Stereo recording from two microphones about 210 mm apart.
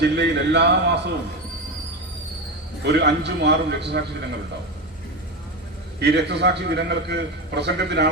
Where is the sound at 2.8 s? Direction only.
55° right (ahead or behind).